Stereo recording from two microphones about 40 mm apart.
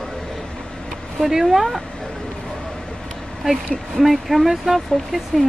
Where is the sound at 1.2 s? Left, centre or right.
Centre.